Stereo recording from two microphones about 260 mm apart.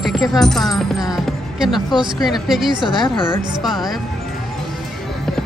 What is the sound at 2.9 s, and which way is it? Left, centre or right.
Speech, centre.